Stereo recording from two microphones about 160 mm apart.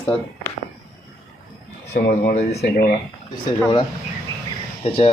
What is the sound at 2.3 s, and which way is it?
Speech, 45° left (ahead or behind).